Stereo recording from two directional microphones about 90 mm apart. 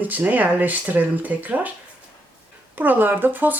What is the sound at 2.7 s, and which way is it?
Speech, 20° right (ahead or behind).